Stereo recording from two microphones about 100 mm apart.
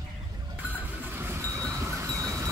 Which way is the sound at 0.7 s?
20° right (ahead or behind).